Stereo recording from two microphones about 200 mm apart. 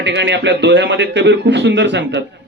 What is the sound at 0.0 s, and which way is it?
Speech, 60° right (ahead or behind).